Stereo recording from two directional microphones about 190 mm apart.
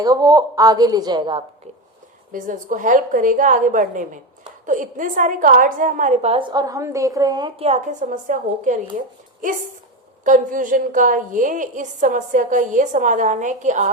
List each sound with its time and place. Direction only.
0.0 s a woman's voice: 20° right (ahead or behind)
2.3 s a woman's voice: 45° right (ahead or behind)
10.2 s a woman's voice: 45° right (ahead or behind)